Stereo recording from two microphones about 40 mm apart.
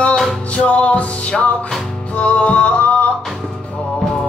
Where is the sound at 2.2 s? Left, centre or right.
Left.